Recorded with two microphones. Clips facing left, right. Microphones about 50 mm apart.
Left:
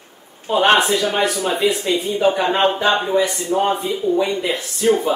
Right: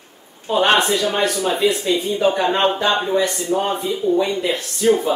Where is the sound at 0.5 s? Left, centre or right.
Centre.